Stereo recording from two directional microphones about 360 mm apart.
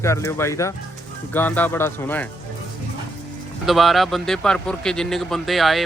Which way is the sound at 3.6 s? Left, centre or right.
Centre.